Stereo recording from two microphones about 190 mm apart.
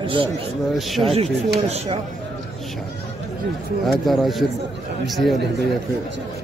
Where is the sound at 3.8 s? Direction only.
Centre (ahead or behind).